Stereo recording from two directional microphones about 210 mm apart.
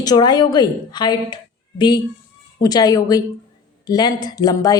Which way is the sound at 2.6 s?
20° left (ahead or behind).